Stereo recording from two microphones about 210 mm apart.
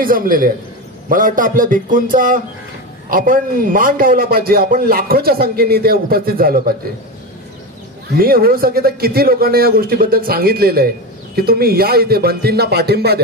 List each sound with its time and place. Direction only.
0.0 s a man's voice: 40° right (ahead or behind)
8.1 s a man's voice: 45° right (ahead or behind)